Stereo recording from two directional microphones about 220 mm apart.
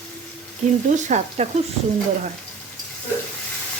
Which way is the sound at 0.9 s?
35° right (ahead or behind).